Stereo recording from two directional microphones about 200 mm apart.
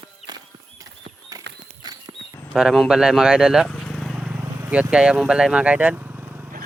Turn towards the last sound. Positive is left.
turn(degrees=-10)  # may be behind; listen again after turning